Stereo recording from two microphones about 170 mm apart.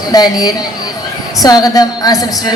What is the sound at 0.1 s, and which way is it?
A woman's voice, 20° left (ahead or behind).